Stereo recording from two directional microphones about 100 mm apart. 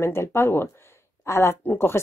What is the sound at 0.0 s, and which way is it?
Speech, 25° left (ahead or behind).